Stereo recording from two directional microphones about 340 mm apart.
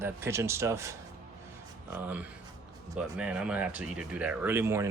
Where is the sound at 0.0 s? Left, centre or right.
Centre.